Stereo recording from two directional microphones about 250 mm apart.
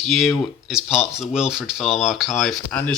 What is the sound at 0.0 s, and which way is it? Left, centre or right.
Speech, centre.